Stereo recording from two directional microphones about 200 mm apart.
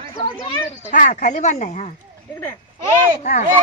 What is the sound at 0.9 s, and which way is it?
A woman's voice, 40° left (ahead or behind).